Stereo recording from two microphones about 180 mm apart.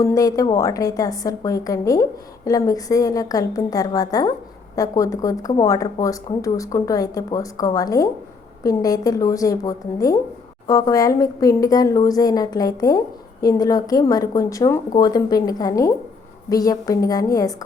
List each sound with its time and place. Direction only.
0.0 s a woman's voice: 20° left (ahead or behind)